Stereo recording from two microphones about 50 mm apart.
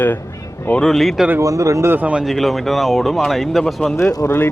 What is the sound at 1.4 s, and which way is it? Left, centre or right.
Speech, right.